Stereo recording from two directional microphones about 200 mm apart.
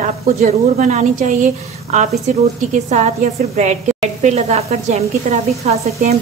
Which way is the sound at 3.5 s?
35° right (ahead or behind).